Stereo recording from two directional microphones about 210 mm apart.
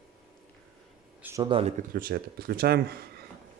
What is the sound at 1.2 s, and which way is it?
Speech, 15° right (ahead or behind).